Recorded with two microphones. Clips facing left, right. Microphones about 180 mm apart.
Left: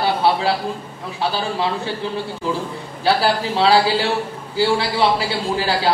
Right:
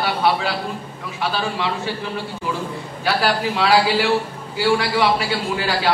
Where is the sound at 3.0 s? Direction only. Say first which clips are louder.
Left 2 dB; 30° left (ahead or behind).